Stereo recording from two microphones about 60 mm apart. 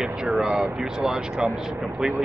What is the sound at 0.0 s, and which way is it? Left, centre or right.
Speech, centre.